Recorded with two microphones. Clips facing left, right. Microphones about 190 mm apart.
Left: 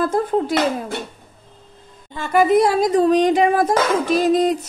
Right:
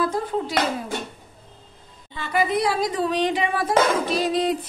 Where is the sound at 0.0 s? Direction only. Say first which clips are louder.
Left 5 dB; 50° left (ahead or behind).